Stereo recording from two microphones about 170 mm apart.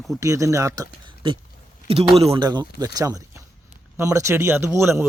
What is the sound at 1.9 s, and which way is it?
Speech, 35° right (ahead or behind).